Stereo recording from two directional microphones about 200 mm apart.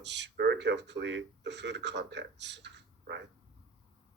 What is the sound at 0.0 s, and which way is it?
Speech, 60° right (ahead or behind).